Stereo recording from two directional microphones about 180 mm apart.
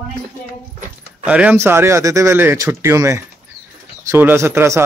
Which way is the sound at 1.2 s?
5° right (ahead or behind).